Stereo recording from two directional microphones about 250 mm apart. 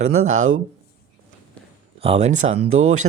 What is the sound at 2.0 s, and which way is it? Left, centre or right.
Speech, right.